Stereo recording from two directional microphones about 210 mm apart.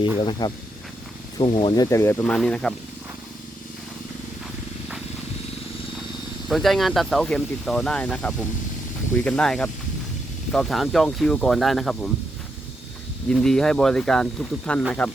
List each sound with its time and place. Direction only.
0.0 s speech: 20° left (ahead or behind); by 2.7 s centre (ahead or behind)
6.5 s speech: centre (ahead or behind)
13.2 s speech: 5° left (ahead or behind)